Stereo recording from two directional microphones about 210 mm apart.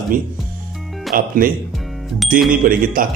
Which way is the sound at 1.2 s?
40° right (ahead or behind).